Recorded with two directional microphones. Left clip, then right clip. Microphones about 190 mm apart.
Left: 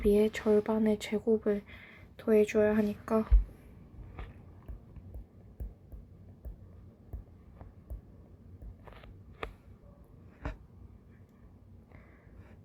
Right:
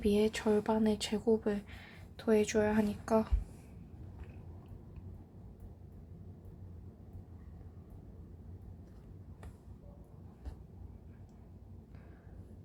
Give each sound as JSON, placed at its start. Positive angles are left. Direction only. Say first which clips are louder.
{"t": 0.0, "sound": "speech", "louder": "left 4 dB", "side_deg": 20}